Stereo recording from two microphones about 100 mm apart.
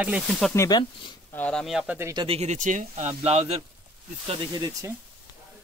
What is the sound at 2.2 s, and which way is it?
Speech, 70° right (ahead or behind).